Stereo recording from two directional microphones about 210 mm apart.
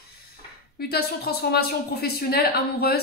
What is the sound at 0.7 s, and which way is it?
A woman's voice, 50° left (ahead or behind).